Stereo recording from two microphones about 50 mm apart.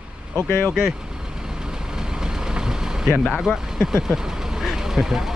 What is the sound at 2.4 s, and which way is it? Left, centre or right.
Vehicle, centre.